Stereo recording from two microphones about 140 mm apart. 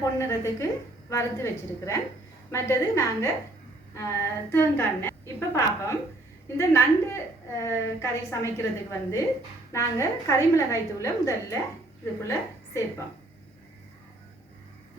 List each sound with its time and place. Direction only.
0.2 s a woman's voice: 20° left (ahead or behind)